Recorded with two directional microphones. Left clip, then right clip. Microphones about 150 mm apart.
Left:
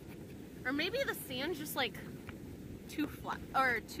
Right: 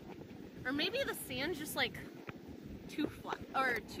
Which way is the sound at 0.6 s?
15° right (ahead or behind).